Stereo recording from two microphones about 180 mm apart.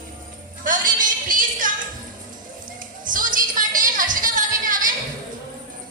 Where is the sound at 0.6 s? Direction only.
50° right (ahead or behind).